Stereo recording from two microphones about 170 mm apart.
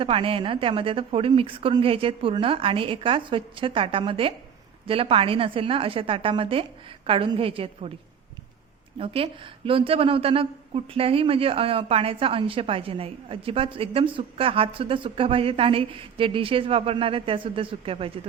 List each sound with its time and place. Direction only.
0.0 s a woman's voice: 30° right (ahead or behind)
9.0 s a woman's voice: 30° right (ahead or behind)